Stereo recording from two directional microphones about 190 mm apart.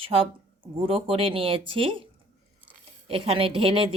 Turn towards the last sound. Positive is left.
turn(degrees=-30)  # may be behind; listen again after turning